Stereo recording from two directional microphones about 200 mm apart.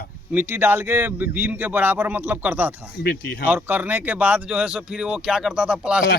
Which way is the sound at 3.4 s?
10° right (ahead or behind).